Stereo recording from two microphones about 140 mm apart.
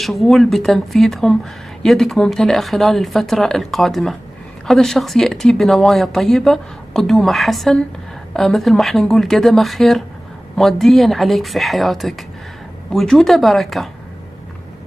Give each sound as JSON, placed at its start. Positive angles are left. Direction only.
{"t": 0.0, "sound": "speech", "side_deg": 0}